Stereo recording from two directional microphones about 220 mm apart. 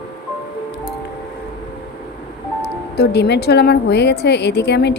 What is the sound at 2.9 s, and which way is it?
A woman's voice, 45° left (ahead or behind).